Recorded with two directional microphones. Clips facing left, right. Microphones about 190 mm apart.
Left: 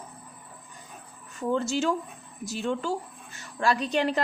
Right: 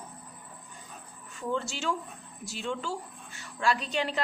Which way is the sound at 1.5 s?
45° left (ahead or behind).